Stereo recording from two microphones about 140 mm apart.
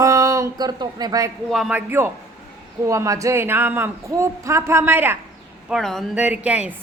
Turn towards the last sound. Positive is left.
turn(degrees=-10)  # may be behind; listen again after turning